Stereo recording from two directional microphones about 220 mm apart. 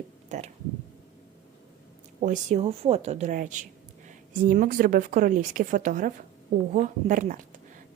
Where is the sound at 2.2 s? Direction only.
35° right (ahead or behind).